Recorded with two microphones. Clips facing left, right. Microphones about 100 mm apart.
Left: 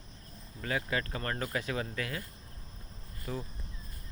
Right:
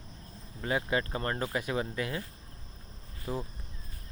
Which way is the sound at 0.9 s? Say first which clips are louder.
Right 3 dB; 25° right (ahead or behind).